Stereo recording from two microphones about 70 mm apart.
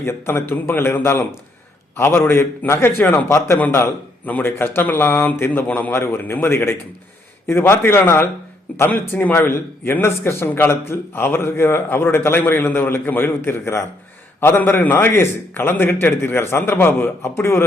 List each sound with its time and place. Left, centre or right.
0.0 s speech: left
4.3 s speech: left
5.9 s speech: left